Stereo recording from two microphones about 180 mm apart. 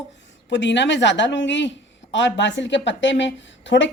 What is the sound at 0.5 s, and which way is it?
A woman's voice, 80° left.